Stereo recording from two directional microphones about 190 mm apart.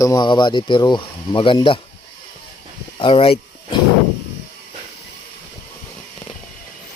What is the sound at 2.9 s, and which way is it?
Speech, 30° left (ahead or behind).